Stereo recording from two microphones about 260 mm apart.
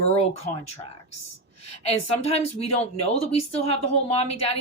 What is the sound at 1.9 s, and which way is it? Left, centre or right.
Speech, left.